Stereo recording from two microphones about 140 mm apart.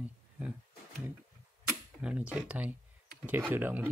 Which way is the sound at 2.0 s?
5° right (ahead or behind).